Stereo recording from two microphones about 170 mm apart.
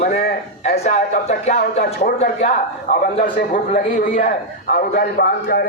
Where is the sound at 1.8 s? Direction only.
60° left (ahead or behind).